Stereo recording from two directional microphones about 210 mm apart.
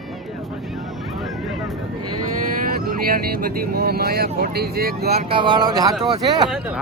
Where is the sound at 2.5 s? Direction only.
45° right (ahead or behind).